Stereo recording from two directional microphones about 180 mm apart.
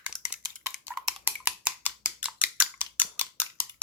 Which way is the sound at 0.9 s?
5° right (ahead or behind).